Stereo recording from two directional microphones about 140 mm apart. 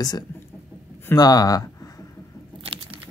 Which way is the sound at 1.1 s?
25° left (ahead or behind).